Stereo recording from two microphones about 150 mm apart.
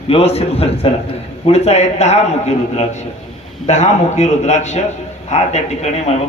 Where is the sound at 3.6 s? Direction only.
50° left (ahead or behind).